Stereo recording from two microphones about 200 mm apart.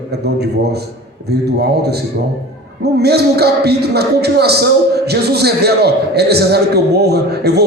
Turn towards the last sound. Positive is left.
turn(degrees=-55)  # may be behind; listen again after turning